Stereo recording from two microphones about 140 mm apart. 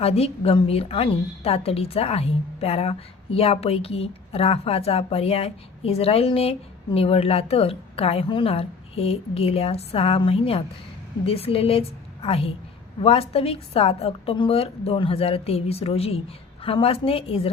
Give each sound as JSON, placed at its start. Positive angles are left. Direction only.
{"t": 0.0, "sound": "a woman's voice", "side_deg": 45}